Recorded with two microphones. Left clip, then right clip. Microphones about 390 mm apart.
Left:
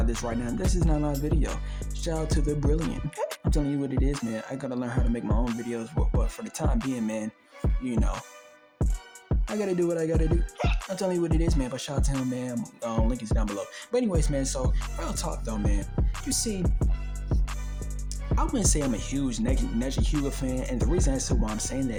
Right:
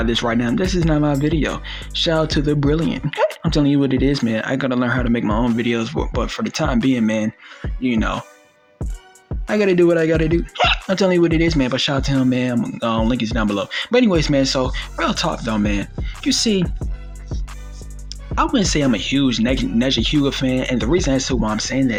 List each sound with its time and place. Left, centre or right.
0.0 s speech: left
9.6 s speech: left
16.6 s music: centre
18.5 s speech: left